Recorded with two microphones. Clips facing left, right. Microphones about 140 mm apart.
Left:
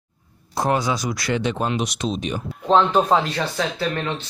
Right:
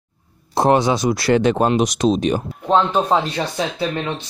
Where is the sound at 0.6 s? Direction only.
25° right (ahead or behind).